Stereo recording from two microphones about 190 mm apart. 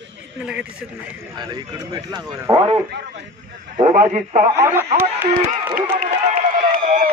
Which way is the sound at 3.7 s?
40° right (ahead or behind).